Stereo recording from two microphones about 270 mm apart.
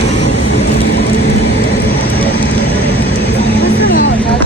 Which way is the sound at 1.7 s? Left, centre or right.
Left.